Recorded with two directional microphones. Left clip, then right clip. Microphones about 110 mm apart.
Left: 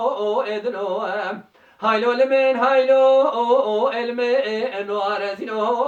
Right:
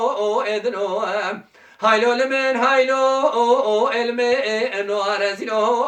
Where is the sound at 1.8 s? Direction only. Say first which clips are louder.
Right 1 dB; 15° left (ahead or behind).